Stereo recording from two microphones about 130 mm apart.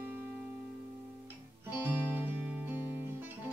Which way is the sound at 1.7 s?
15° right (ahead or behind).